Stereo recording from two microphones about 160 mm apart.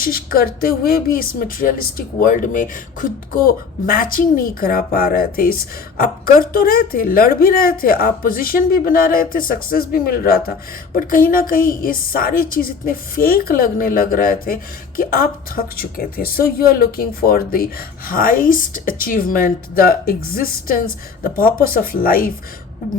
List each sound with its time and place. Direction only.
0.0 s a woman's voice: 65° left (ahead or behind)